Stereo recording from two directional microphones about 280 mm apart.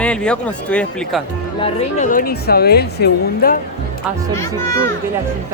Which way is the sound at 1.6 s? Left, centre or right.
Left.